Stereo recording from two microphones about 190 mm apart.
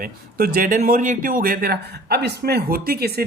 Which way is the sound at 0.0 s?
50° right (ahead or behind).